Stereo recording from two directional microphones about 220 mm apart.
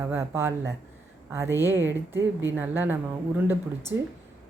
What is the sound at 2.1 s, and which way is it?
A woman's voice, 10° right (ahead or behind).